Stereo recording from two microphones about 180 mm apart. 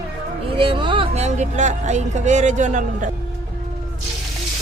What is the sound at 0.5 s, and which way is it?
Speech, 30° right (ahead or behind).